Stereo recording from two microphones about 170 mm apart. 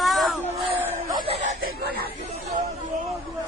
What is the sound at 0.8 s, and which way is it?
Chuckle, 10° right (ahead or behind).